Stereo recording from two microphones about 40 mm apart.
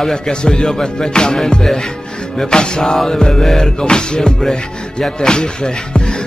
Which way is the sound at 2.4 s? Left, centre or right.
Left.